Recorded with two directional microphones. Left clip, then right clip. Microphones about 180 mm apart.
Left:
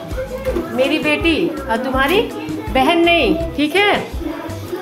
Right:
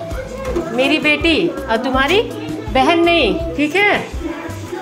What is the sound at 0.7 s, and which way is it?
A woman's voice, 30° right (ahead or behind).